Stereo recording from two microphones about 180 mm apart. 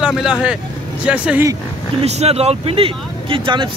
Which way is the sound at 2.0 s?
35° right (ahead or behind).